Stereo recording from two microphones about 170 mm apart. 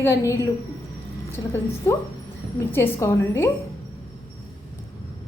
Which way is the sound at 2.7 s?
15° left (ahead or behind).